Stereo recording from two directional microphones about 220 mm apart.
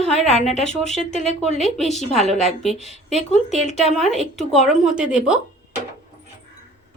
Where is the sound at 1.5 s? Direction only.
30° left (ahead or behind).